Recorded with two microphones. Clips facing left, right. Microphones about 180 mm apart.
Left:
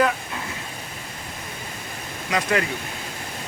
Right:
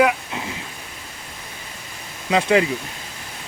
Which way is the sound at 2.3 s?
25° right (ahead or behind).